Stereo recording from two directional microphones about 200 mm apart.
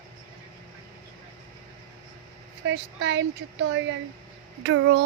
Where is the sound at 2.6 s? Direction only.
65° right (ahead or behind).